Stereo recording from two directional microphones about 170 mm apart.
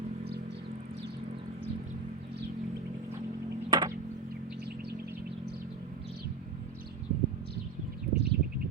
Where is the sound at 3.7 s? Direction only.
25° right (ahead or behind).